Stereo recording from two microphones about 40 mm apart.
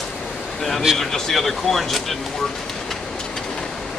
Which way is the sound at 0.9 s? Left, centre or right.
Centre.